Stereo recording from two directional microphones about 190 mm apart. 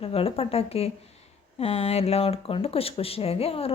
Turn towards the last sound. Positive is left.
turn(degrees=30)  # may be behind; listen again after turning